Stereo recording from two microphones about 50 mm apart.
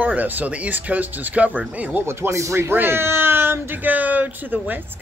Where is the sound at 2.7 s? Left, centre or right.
Right.